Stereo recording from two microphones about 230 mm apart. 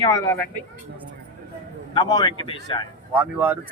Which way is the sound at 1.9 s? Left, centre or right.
Centre.